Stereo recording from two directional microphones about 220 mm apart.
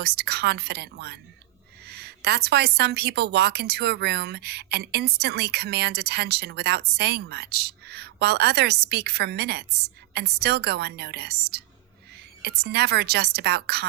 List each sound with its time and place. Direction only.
0.0 s a woman's voice: 50° right (ahead or behind)